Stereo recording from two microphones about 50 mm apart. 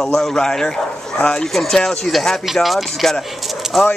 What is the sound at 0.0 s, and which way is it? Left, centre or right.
Speech, centre.